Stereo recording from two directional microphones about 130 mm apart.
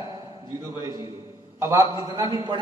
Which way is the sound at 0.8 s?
30° right (ahead or behind).